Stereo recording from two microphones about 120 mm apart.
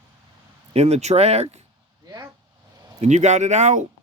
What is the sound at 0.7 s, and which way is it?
Speech, 60° right (ahead or behind).